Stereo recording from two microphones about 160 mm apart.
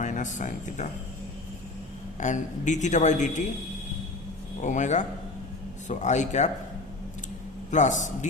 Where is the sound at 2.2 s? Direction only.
50° left (ahead or behind).